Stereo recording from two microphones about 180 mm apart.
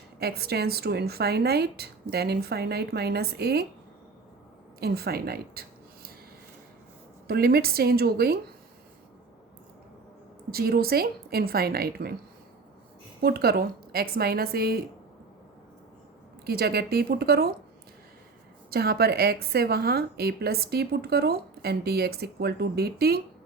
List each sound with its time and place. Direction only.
0.2 s a woman's voice: 60° right (ahead or behind)
4.8 s speech: 60° right (ahead or behind)
7.3 s a woman's voice: 60° right (ahead or behind)
10.5 s a woman's voice: 60° right (ahead or behind)
13.2 s a woman's voice: 60° right (ahead or behind)
16.5 s a woman's voice: 60° right (ahead or behind)
18.7 s a woman's voice: 60° right (ahead or behind)